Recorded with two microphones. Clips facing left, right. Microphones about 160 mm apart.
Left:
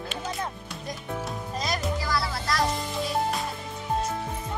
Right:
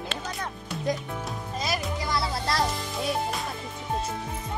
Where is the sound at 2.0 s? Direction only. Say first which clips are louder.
Right 1 dB; 25° right (ahead or behind).